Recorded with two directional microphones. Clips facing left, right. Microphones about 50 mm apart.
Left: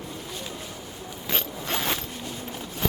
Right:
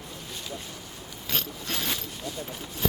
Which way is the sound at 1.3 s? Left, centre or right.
Left.